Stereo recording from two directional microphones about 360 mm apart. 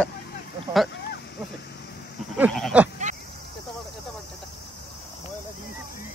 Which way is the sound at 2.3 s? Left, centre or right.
Centre.